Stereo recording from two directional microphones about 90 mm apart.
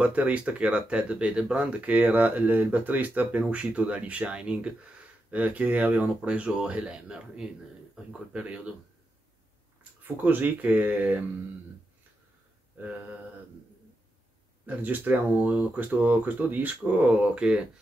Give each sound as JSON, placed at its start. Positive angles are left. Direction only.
{"t": 0.0, "sound": "speech", "side_deg": -15}
{"t": 10.0, "sound": "speech", "side_deg": -20}
{"t": 14.8, "sound": "speech", "side_deg": -20}